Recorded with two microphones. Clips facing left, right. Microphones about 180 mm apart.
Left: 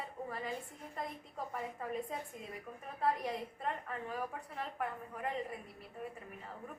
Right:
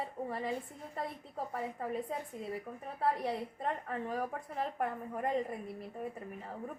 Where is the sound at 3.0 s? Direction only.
35° right (ahead or behind).